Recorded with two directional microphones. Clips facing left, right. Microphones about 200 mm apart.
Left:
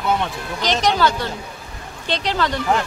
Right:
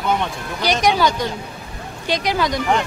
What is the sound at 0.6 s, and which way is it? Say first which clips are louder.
Speech: right 1 dB; 10° right (ahead or behind).